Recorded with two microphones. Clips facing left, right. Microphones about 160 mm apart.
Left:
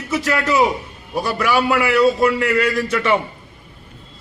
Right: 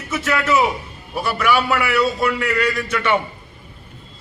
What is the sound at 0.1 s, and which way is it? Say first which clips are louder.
A man's voice: even; 35° left (ahead or behind).